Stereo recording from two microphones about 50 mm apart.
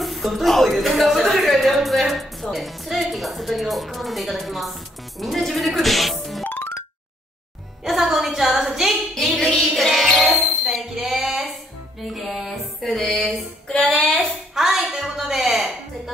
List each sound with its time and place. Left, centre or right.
0.0 s speech: centre
5.2 s music: centre
6.4 s music: left
7.8 s music: centre
10.6 s a sound: centre
12.0 s music: centre
13.7 s a sound: centre
14.5 s music: centre